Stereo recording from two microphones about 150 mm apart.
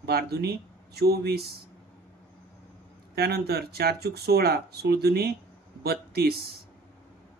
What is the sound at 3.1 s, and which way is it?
Speech, 90° right.